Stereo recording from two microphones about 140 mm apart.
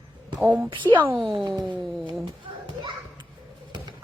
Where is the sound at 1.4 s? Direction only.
30° right (ahead or behind).